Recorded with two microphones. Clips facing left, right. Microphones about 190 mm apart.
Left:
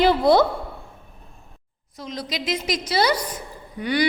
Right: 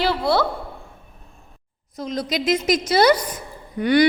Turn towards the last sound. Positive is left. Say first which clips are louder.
# right 6 dB
turn(degrees=-50)  # may be behind; listen again after turning